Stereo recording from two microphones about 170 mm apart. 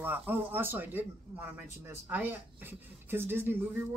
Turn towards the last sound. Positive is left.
turn(degrees=-10)  # may be behind; listen again after turning